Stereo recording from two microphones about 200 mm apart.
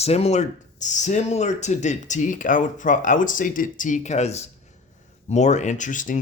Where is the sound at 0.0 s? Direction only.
30° left (ahead or behind).